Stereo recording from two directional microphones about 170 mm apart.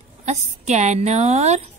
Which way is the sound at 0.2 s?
45° right (ahead or behind).